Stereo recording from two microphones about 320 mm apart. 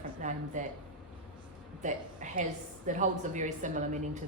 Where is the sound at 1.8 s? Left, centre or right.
Right.